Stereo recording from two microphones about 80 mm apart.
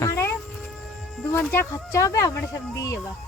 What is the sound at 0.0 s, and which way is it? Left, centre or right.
Hum, left.